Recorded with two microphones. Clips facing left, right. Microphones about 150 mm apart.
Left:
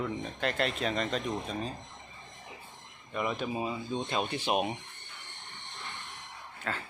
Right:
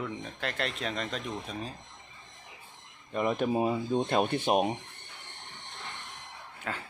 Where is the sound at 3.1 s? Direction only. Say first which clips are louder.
Right 5 dB; 40° right (ahead or behind).